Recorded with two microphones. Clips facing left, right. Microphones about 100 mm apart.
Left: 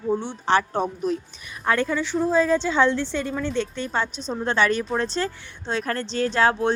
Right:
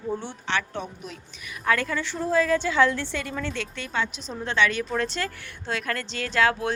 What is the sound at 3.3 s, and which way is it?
Speech, 15° left (ahead or behind).